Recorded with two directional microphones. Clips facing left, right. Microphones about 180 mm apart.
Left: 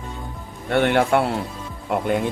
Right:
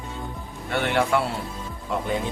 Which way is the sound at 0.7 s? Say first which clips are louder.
Left 5 dB; 55° left (ahead or behind).